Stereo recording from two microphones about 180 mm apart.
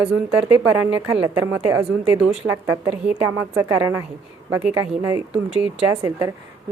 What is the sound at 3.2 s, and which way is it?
A woman's voice, 20° right (ahead or behind).